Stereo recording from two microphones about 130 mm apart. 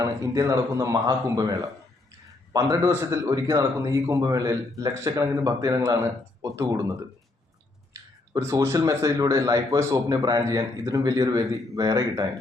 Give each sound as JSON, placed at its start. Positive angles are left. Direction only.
{"t": 0.0, "sound": "a man's voice", "side_deg": -25}
{"t": 8.4, "sound": "a man's voice", "side_deg": -20}